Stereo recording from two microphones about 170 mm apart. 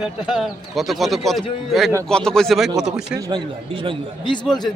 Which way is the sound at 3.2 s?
25° right (ahead or behind).